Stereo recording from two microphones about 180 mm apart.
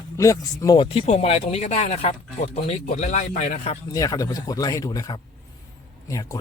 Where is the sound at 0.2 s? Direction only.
20° left (ahead or behind); by 3.8 s 35° left (ahead or behind).